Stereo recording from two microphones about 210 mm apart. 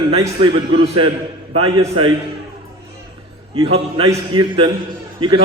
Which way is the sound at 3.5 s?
25° right (ahead or behind).